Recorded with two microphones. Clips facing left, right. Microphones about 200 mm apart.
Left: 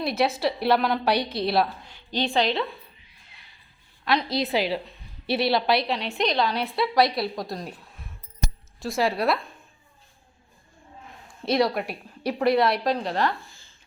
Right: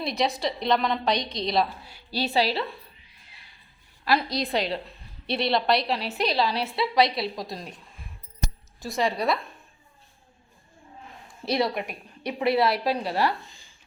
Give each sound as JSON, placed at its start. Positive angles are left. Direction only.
{"t": 0.0, "sound": "a woman's voice", "side_deg": 0}
{"t": 1.8, "sound": "speech", "side_deg": -10}
{"t": 4.0, "sound": "a woman's voice", "side_deg": -5}
{"t": 11.4, "sound": "a woman's voice", "side_deg": 0}
{"t": 13.4, "sound": "a sound", "side_deg": -15}